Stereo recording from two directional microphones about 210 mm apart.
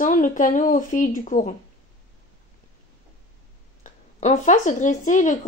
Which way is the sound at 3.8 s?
35° left (ahead or behind).